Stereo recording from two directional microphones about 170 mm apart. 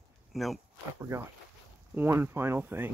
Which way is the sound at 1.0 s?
15° right (ahead or behind).